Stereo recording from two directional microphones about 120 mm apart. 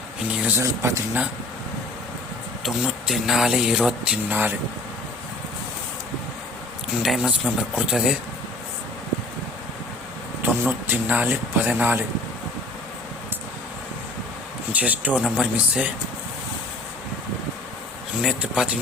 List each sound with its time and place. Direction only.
0.3 s speech: 15° right (ahead or behind)
0.6 s speech: 25° right (ahead or behind)
2.6 s speech: 5° right (ahead or behind)
7.0 s speech: 5° right (ahead or behind)
10.4 s speech: 15° right (ahead or behind)
14.7 s speech: 10° right (ahead or behind)
18.2 s speech: 5° right (ahead or behind)